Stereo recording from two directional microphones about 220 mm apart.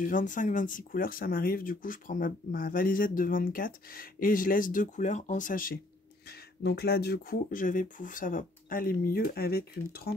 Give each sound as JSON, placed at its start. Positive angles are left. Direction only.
{"t": 0.0, "sound": "speech", "side_deg": 35}